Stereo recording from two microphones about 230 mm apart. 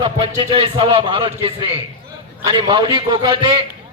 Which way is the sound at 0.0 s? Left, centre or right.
Right.